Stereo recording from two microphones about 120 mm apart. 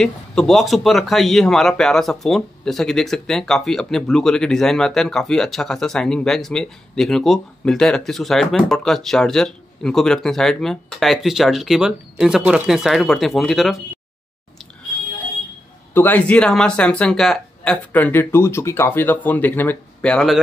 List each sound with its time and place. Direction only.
0.0 s a man's voice: 5° left (ahead or behind)
15.9 s speech: 15° left (ahead or behind)
17.9 s speech: 15° left (ahead or behind)